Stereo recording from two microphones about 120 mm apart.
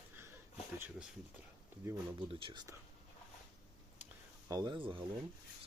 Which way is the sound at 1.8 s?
20° right (ahead or behind).